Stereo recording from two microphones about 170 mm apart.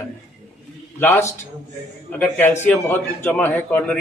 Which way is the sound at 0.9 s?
15° left (ahead or behind).